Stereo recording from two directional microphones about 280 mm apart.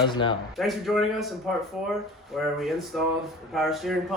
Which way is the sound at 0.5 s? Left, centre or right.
Centre.